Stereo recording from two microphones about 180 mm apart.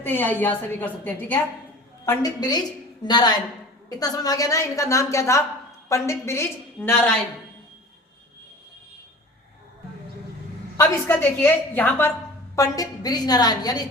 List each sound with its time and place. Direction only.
0.0 s a woman's voice: 10° left (ahead or behind)
2.0 s a woman's voice: 20° left (ahead or behind)
10.8 s a woman's voice: 15° left (ahead or behind)